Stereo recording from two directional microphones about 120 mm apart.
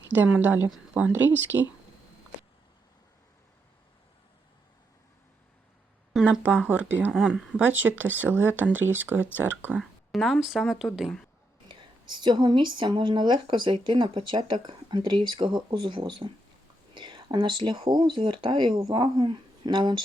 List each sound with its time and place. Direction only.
0.1 s speech: 15° right (ahead or behind)
6.2 s speech: 10° right (ahead or behind)
10.1 s speech: centre (ahead or behind)
11.7 s speech: 40° right (ahead or behind)